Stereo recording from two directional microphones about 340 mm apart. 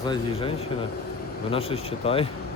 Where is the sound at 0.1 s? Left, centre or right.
Centre.